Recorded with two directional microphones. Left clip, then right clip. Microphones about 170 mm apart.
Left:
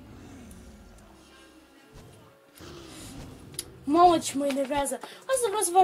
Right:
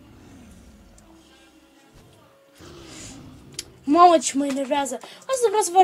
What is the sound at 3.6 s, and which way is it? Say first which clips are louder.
A woman's voice: right 5 dB; 30° right (ahead or behind).